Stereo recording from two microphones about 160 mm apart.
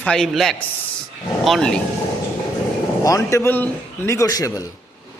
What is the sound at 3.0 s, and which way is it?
A woman's voice, 20° left (ahead or behind).